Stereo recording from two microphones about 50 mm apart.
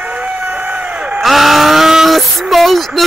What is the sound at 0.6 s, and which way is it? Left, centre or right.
Crowd, right.